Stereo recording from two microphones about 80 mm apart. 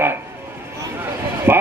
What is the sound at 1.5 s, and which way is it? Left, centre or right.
Speech, right.